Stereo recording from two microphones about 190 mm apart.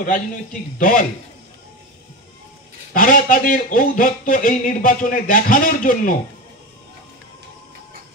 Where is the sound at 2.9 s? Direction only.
45° left (ahead or behind).